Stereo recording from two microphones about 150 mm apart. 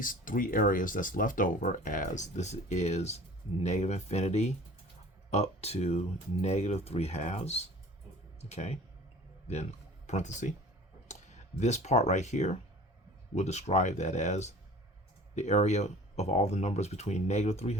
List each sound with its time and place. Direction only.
0.0 s speech: 65° left (ahead or behind); by 8.8 s 45° left (ahead or behind)
10.1 s speech: 50° left (ahead or behind)